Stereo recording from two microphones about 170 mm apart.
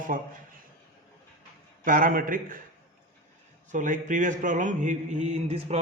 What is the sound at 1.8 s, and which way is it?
Speech, 55° right (ahead or behind).